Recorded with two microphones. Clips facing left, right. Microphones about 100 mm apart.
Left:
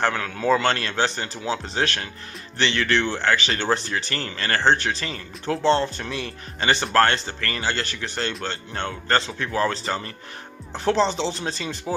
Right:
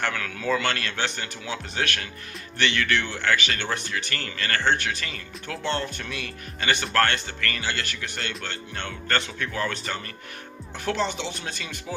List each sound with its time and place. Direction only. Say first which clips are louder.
0.0 s speech: left 5 dB; 30° left (ahead or behind)